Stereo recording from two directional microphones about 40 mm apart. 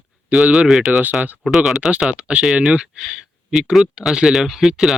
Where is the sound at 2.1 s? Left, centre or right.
Right.